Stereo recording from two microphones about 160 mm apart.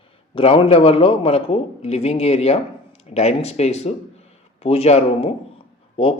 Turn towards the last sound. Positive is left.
turn(degrees=35)  # may be behind; listen again after turning